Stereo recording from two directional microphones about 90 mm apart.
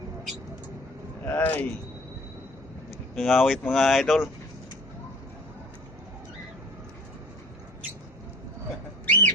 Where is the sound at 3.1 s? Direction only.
5° left (ahead or behind).